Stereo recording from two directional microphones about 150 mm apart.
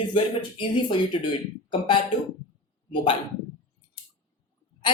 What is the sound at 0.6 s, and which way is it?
Speech, 35° left (ahead or behind).